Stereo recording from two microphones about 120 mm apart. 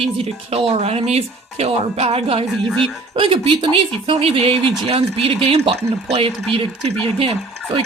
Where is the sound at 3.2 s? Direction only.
45° right (ahead or behind).